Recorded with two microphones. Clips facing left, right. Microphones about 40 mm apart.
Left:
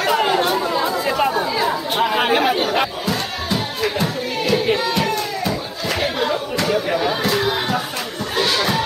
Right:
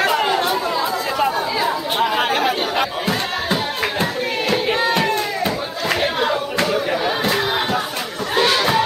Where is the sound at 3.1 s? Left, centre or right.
Right.